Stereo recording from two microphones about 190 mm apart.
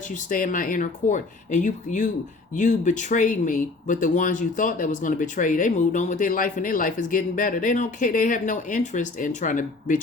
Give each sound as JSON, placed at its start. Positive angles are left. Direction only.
{"t": 0.3, "sound": "speech", "side_deg": 45}